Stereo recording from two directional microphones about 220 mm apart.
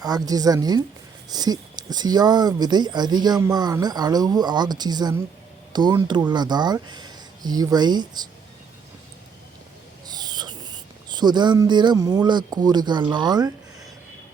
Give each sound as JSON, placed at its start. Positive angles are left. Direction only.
{"t": 0.0, "sound": "a woman's voice", "side_deg": -15}
{"t": 10.1, "sound": "speech", "side_deg": -20}